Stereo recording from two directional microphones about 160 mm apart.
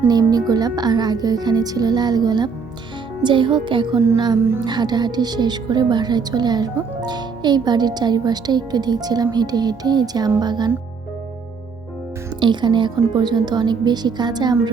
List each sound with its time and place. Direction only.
0.1 s speech: 25° right (ahead or behind)
4.0 s music: 20° right (ahead or behind)
4.6 s speech: 25° right (ahead or behind)
12.4 s speech: 30° right (ahead or behind)